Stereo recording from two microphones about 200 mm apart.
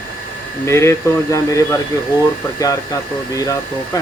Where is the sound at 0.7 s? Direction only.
15° left (ahead or behind).